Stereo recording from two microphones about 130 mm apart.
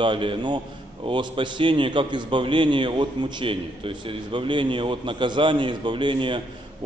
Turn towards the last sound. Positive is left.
turn(degrees=-40)  # may be behind; listen again after turning